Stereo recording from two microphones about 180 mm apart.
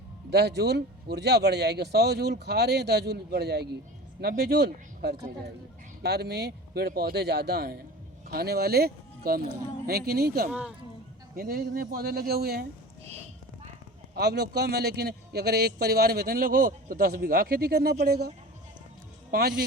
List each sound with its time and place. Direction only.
0.3 s a man's voice: 65° right (ahead or behind)
10.5 s speech: 5° right (ahead or behind)
11.3 s a man's voice: 55° right (ahead or behind)
14.2 s a man's voice: 65° right (ahead or behind)